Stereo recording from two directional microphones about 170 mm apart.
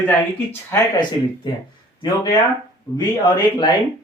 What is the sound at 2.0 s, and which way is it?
Speech, 25° left (ahead or behind).